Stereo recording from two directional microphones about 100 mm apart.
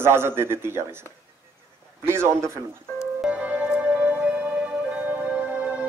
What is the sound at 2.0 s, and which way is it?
Speech, 25° right (ahead or behind).